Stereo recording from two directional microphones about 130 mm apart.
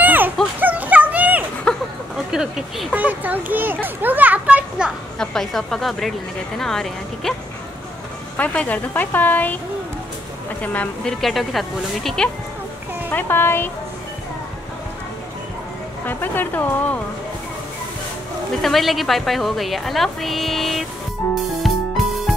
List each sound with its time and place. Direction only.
0.0 s a sound: 15° right (ahead or behind)
0.6 s dog: 10° right (ahead or behind)
1.7 s a sound: 5° left (ahead or behind)
2.3 s a sound: 5° right (ahead or behind)
3.8 s children playing: 15° right (ahead or behind)
5.2 s a woman's voice: 5° left (ahead or behind)
8.4 s a woman's voice: 10° left (ahead or behind)
10.6 s a woman's voice: 10° left (ahead or behind)
13.1 s a woman's voice: 15° left (ahead or behind)
16.1 s a woman's voice: 15° left (ahead or behind)
18.6 s a woman's voice: centre (ahead or behind)
21.6 s music: centre (ahead or behind)